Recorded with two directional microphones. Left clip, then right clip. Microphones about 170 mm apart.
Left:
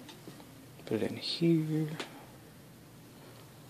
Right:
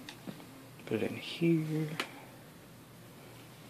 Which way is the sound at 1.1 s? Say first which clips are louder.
Left 4 dB; 90° left.